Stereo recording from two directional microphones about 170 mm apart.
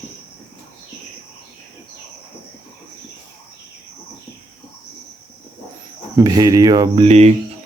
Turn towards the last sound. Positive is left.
turn(degrees=-40)  # may be behind; listen again after turning